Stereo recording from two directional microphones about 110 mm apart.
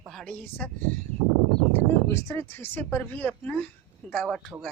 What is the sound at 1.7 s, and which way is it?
Speech, 25° left (ahead or behind).